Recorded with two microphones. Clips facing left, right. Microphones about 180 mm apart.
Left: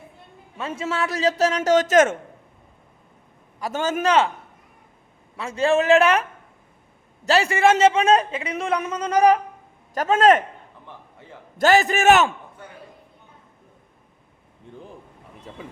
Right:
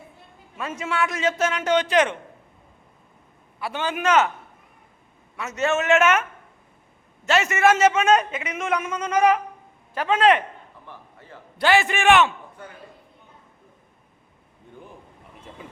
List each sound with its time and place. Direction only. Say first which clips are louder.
0.5 s a man's voice: left 1 dB; 30° left (ahead or behind)
3.6 s a man's voice: left 3 dB; 40° left (ahead or behind)
5.4 s a man's voice: left 4 dB; 30° left (ahead or behind)
7.3 s a man's voice: left 1 dB; 30° left (ahead or behind)
10.8 s a sound: left 1 dB; 20° left (ahead or behind)
11.5 s a man's voice: left 3 dB; 40° left (ahead or behind)